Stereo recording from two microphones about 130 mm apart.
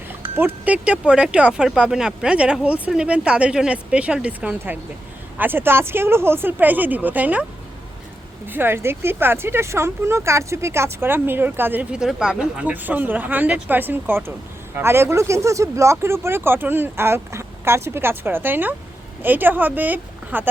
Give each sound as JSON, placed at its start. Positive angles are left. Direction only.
{"t": 0.3, "sound": "speech", "side_deg": -15}
{"t": 8.4, "sound": "speech", "side_deg": -15}